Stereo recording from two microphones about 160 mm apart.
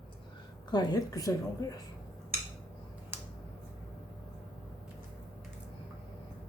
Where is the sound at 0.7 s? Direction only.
25° left (ahead or behind).